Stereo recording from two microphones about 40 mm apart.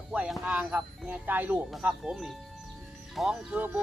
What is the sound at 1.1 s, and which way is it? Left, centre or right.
Speech, right.